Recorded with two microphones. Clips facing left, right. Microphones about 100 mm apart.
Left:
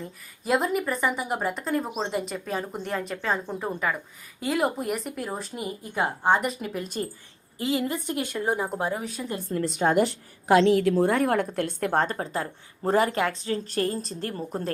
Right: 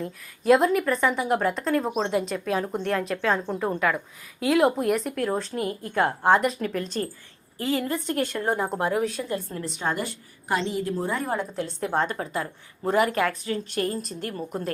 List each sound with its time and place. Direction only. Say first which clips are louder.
0.0 s a woman's voice: right 8 dB; centre (ahead or behind)
9.9 s a woman's voice: left 8 dB; 90° left; by 11.9 s 60° left (ahead or behind)
11.9 s speech: right 1 dB; 35° left (ahead or behind)